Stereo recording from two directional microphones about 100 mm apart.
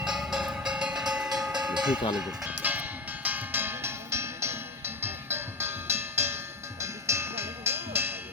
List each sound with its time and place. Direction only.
0.0 s train: 5° right (ahead or behind)
2.1 s a sound: 10° right (ahead or behind)
3.2 s music: 20° right (ahead or behind)